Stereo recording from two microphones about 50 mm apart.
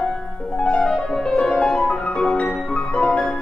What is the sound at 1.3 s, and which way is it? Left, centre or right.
Music, left.